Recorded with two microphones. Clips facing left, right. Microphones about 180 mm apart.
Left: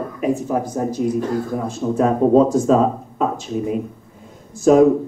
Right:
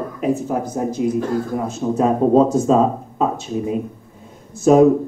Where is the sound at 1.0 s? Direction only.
5° right (ahead or behind).